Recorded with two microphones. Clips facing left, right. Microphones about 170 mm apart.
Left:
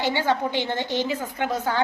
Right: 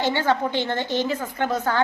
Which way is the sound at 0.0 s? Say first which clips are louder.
Right 1 dB; 10° left (ahead or behind).